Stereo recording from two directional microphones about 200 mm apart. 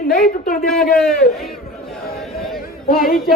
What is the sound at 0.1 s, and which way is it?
Speech, 45° left (ahead or behind).